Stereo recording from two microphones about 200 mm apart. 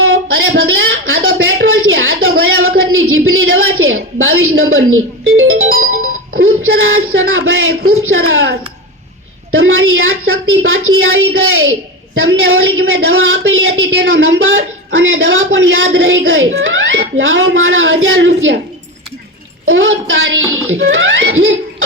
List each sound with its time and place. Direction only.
0.0 s a sound: 75° right (ahead or behind); by 6.1 s 90° right
6.4 s a woman's voice: 75° right (ahead or behind)
9.6 s a woman's voice: 80° right
19.6 s a woman's voice: 75° right (ahead or behind)